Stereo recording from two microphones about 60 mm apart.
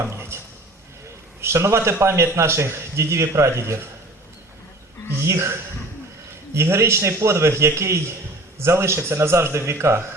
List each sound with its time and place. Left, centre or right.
0.0 s a sound: right
1.4 s a man's voice: right
5.2 s a man's voice: right